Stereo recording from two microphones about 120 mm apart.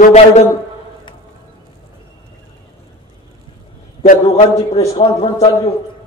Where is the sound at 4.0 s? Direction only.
65° left (ahead or behind).